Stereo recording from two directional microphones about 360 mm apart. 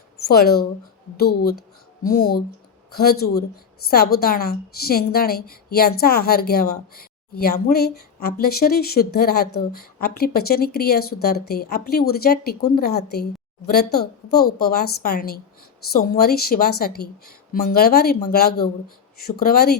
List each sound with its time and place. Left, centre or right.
0.2 s speech: left
2.0 s a woman's voice: left